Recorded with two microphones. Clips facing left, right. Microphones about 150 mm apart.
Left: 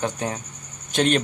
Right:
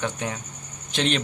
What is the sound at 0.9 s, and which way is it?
Speech, 45° left (ahead or behind).